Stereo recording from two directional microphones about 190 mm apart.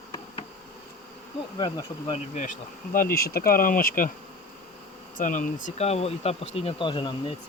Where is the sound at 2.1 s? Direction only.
40° left (ahead or behind).